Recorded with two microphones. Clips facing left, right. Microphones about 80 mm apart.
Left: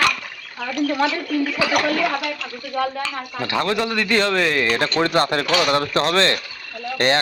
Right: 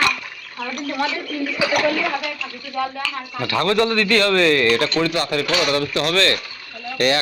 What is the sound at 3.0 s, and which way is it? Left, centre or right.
A man's voice, left.